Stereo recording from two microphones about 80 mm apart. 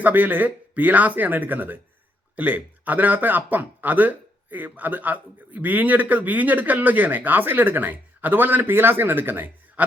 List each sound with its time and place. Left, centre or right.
0.0 s speech: right